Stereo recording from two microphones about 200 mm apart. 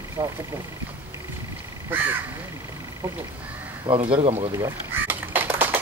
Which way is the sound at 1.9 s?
10° right (ahead or behind).